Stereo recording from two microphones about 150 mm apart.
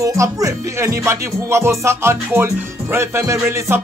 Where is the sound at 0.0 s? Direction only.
20° right (ahead or behind).